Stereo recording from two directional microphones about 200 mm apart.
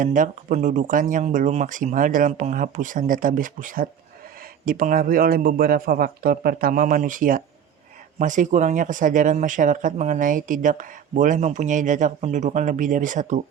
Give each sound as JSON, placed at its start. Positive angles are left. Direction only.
{"t": 0.0, "sound": "speech", "side_deg": -40}